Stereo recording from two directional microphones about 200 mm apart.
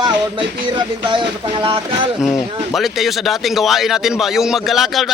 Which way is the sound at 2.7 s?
Centre (ahead or behind).